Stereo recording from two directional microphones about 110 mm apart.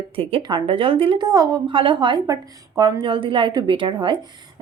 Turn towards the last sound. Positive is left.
turn(degrees=-50)  # may be behind; listen again after turning